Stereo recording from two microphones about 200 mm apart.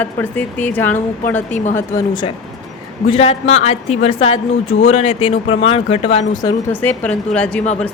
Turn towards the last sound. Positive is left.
turn(degrees=5)  # may be behind; listen again after turning